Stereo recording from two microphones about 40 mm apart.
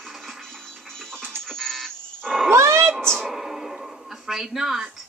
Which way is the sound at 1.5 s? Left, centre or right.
Centre.